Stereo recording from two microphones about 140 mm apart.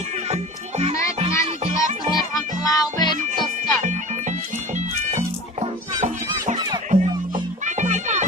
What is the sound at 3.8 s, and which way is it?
Music, 60° right (ahead or behind).